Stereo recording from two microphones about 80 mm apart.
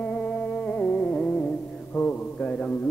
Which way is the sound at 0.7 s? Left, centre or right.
Centre.